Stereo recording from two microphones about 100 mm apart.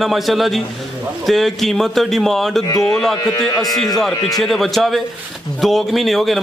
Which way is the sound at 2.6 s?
40° left (ahead or behind).